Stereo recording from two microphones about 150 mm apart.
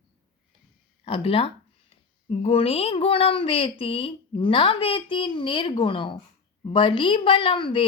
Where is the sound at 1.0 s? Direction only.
40° left (ahead or behind).